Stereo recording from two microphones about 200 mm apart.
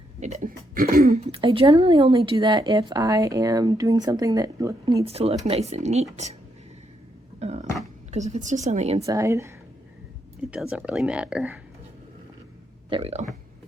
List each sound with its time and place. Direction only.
0.2 s speech: 35° right (ahead or behind)
1.2 s speech: 30° right (ahead or behind)
5.0 s speech: 30° right (ahead or behind)
7.3 s a sound: 35° right (ahead or behind)
8.1 s speech: 35° right (ahead or behind)
9.0 s speech: 15° right (ahead or behind)
10.5 s speech: 5° right (ahead or behind)
12.9 s speech: 30° right (ahead or behind)